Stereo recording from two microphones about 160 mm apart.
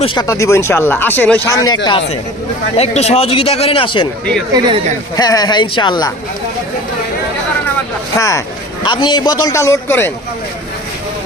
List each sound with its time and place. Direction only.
0.0 s speech: 30° left (ahead or behind)
0.3 s speech: 15° left (ahead or behind)
1.5 s a man's voice: 25° left (ahead or behind)
2.7 s speech: 45° left (ahead or behind)
4.5 s a man's voice: 25° right (ahead or behind)
5.1 s a man's voice: 25° left (ahead or behind)
8.8 s a man's voice: 30° left (ahead or behind)